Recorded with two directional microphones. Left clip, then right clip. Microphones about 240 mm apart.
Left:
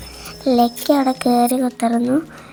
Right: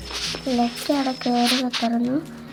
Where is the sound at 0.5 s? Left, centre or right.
Left.